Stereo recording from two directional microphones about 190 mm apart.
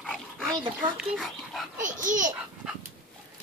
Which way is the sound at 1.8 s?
45° right (ahead or behind).